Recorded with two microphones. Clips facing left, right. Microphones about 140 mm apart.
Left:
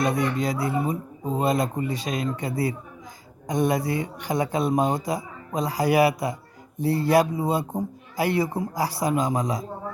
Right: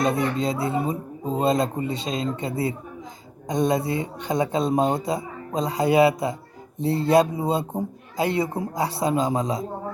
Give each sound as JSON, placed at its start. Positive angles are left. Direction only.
{"t": 0.0, "sound": "a man's voice", "side_deg": -25}